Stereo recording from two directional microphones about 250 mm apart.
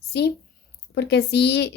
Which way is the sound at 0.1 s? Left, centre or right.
Left.